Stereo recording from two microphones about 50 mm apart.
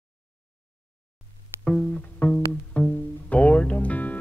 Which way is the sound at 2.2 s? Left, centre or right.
Left.